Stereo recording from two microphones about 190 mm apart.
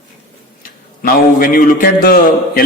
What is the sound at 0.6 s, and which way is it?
A man's voice, 50° left (ahead or behind).